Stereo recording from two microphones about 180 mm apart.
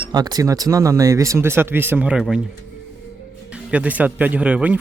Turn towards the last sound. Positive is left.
turn(degrees=-5)  # may be behind; listen again after turning